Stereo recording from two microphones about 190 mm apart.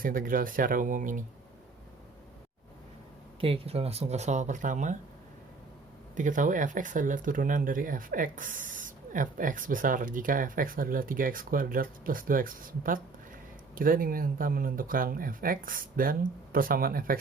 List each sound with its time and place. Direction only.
0.0 s speech: 45° right (ahead or behind)
3.4 s speech: 30° right (ahead or behind)
6.1 s speech: 40° right (ahead or behind)